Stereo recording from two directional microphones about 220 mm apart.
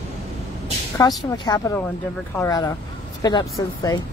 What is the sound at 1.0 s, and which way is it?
Speech, 15° left (ahead or behind).